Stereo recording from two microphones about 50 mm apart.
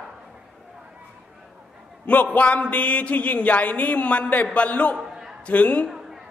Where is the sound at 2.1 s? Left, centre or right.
Left.